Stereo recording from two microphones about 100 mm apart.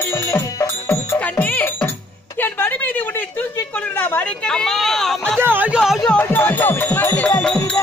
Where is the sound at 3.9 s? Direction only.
15° left (ahead or behind).